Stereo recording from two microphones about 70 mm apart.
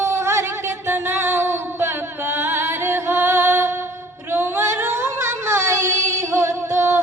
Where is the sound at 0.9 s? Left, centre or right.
Right.